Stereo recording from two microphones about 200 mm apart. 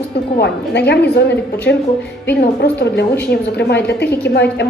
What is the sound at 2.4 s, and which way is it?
A woman's voice, 55° left (ahead or behind).